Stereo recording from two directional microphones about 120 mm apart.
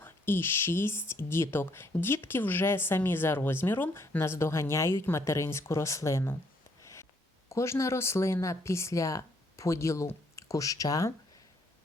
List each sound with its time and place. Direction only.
0.0 s speech: 20° left (ahead or behind)
7.5 s speech: 25° left (ahead or behind)